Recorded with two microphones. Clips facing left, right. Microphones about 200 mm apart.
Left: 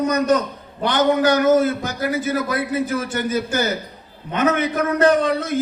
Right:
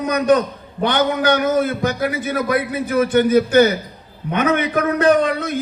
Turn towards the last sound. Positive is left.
turn(degrees=-60)  # may be behind; listen again after turning